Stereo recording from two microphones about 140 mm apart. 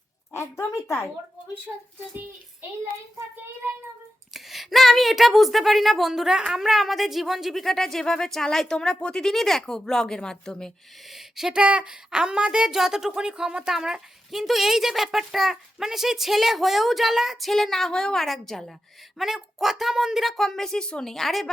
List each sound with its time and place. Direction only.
0.3 s a woman's voice: 20° left (ahead or behind)
4.4 s speech: centre (ahead or behind)